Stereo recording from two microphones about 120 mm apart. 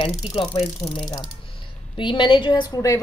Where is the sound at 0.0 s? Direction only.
45° left (ahead or behind).